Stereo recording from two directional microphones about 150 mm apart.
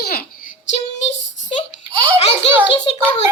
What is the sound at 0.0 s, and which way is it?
Child singing, 90° left.